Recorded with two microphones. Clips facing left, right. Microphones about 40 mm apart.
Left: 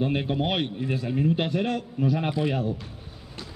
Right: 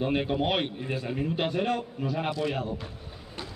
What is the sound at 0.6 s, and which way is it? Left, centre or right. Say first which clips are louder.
A man's voice: left 3 dB; centre.